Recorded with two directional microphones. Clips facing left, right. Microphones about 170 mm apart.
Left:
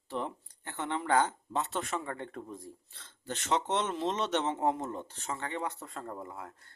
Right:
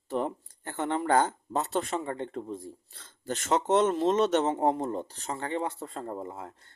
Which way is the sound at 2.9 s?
40° right (ahead or behind).